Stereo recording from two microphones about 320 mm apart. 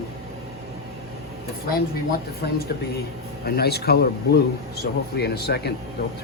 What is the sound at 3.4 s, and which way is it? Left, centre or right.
A man's voice, left.